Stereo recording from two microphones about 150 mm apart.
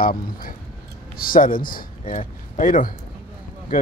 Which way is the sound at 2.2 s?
55° left (ahead or behind).